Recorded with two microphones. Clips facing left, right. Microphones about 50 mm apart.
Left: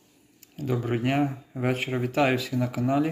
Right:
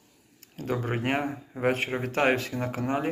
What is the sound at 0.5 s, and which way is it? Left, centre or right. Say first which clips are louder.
Speech: left 2 dB; right.